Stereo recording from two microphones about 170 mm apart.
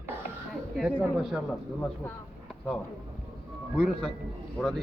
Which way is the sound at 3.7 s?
Centre (ahead or behind).